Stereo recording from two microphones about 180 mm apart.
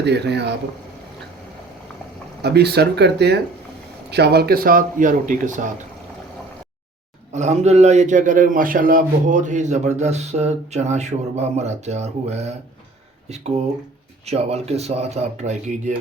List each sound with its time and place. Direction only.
0.0 s speech: 65° right (ahead or behind)
2.4 s speech: 65° right (ahead or behind); by 5.7 s 45° right (ahead or behind)
7.3 s a man's voice: 40° right (ahead or behind)